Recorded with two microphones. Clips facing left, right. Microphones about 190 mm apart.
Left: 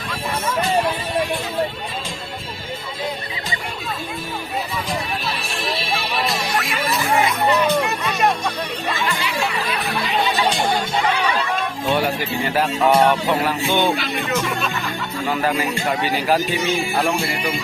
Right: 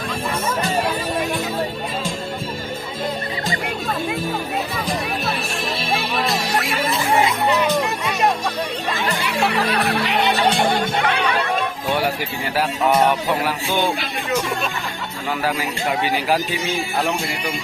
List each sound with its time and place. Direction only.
9.2 s music: 60° right (ahead or behind)
9.7 s music: 70° right (ahead or behind)
15.3 s speech: 5° right (ahead or behind)
17.0 s music: 10° left (ahead or behind)